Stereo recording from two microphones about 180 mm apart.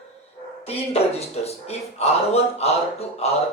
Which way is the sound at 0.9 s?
35° left (ahead or behind).